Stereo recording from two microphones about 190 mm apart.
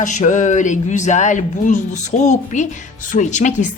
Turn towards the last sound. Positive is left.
turn(degrees=40)  # may be behind; listen again after turning